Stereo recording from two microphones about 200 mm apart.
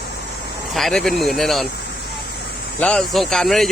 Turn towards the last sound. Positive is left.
turn(degrees=0)  # may be behind; listen again after turning